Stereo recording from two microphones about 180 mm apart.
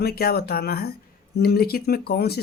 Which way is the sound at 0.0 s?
60° left (ahead or behind).